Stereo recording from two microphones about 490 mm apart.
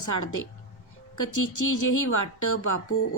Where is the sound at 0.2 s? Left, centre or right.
Left.